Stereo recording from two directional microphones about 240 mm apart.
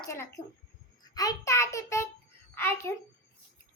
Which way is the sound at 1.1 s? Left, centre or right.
Centre.